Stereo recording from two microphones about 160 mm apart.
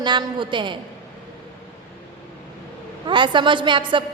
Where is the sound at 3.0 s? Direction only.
30° right (ahead or behind).